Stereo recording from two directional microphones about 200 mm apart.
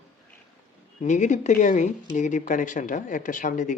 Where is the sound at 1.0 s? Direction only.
35° left (ahead or behind).